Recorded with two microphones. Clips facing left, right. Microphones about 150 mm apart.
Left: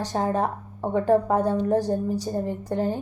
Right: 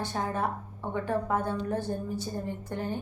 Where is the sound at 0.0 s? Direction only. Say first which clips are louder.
Left 6 dB; 40° left (ahead or behind).